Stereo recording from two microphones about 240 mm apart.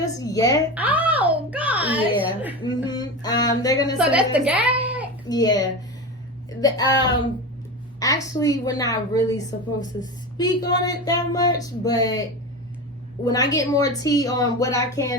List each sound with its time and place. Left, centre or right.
0.0 s speech: centre
0.7 s a child's voice: centre
2.6 s a sound: centre
3.9 s a woman's voice: centre
5.3 s speech: centre